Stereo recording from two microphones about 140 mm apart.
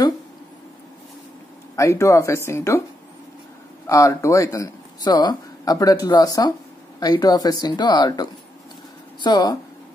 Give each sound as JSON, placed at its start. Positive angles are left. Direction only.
{"t": 1.8, "sound": "speech", "side_deg": 20}
{"t": 3.8, "sound": "speech", "side_deg": 25}